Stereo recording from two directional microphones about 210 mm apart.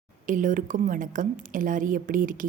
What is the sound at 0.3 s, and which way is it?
A woman's voice, 40° right (ahead or behind).